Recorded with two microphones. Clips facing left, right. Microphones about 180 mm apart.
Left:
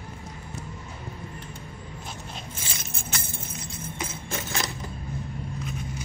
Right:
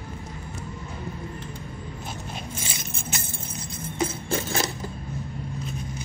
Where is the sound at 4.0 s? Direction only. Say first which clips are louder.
Right 9 dB; 30° right (ahead or behind).